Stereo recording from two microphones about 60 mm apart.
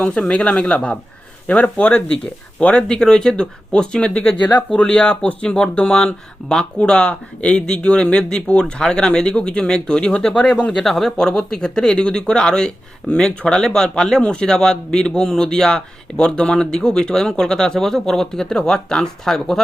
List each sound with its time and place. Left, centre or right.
0.0 s speech: centre